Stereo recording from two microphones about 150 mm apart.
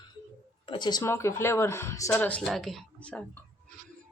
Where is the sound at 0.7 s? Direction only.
30° left (ahead or behind).